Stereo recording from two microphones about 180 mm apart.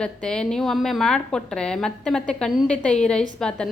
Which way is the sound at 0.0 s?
5° left (ahead or behind).